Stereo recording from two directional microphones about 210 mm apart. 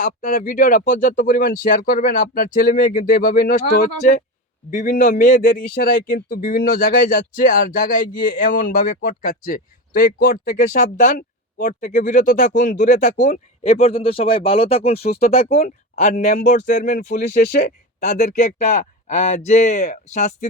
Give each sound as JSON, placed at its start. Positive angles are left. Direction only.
{"t": 0.0, "sound": "speech", "side_deg": 40}